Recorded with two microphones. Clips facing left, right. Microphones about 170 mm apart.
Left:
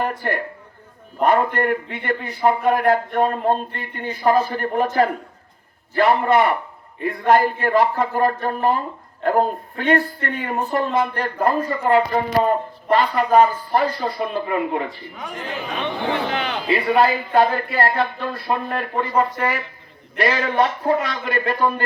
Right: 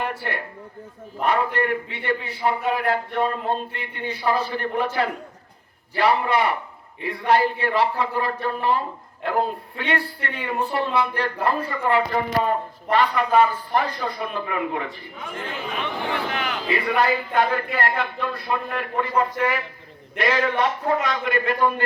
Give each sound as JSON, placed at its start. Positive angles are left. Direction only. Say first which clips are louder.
{"t": 0.2, "sound": "a man's voice", "louder": "left 5 dB", "side_deg": 45}
{"t": 15.8, "sound": "speech", "louder": "left 4 dB", "side_deg": 25}